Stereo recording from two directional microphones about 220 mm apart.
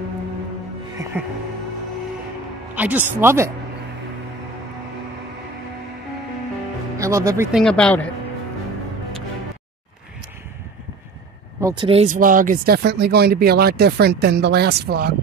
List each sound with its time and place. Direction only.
1.1 s speech: 10° right (ahead or behind)
2.7 s speech: 5° right (ahead or behind)
7.0 s speech: 15° right (ahead or behind)
7.5 s speech: 5° left (ahead or behind)
11.6 s speech: 20° right (ahead or behind); by 15.1 s 45° right (ahead or behind)